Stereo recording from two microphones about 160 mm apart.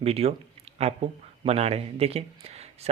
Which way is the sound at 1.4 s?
40° right (ahead or behind).